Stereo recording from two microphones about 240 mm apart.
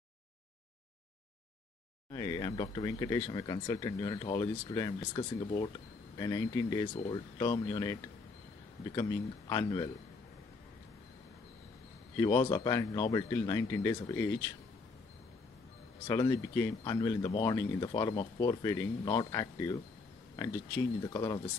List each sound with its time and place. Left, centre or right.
2.1 s speech: centre
12.2 s speech: centre
16.1 s speech: centre